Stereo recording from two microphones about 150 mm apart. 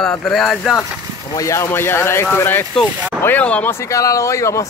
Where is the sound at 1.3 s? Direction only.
20° left (ahead or behind).